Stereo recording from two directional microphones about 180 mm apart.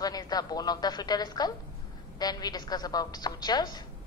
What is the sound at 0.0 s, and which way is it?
A woman's voice, 20° left (ahead or behind).